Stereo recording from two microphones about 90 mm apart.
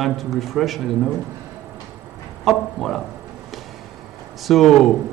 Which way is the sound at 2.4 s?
5° left (ahead or behind).